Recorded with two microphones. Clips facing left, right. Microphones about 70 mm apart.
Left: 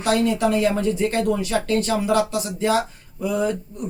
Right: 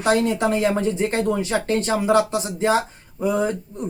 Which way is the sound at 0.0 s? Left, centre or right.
Right.